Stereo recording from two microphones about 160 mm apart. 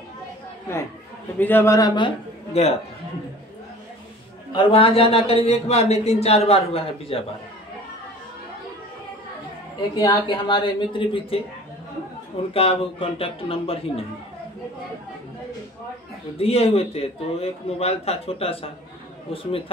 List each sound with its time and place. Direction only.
1.4 s speech: 15° left (ahead or behind); by 2.7 s 35° left (ahead or behind)
4.5 s a man's voice: 35° left (ahead or behind)
9.8 s speech: 30° left (ahead or behind)
12.5 s a man's voice: 35° left (ahead or behind)
16.3 s a man's voice: 35° left (ahead or behind)